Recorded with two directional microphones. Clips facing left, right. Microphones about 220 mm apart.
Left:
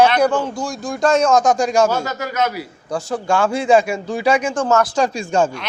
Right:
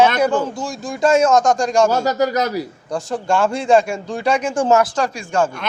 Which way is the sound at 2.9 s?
Centre (ahead or behind).